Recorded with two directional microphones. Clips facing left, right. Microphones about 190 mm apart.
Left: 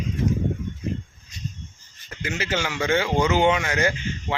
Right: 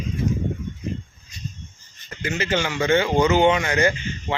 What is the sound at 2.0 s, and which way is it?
Speech, 5° left (ahead or behind).